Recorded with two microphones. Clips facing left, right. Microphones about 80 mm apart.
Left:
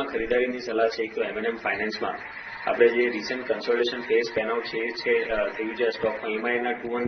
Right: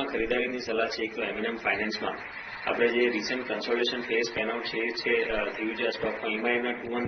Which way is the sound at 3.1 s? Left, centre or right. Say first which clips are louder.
Left 3 dB; left.